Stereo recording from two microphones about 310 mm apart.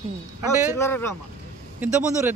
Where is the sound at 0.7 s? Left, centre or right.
Centre.